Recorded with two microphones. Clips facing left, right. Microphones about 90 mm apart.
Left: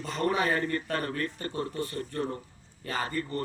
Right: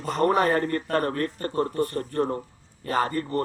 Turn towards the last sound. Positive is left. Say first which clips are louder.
# right 7 dB
turn(degrees=-50)  # may be behind; listen again after turning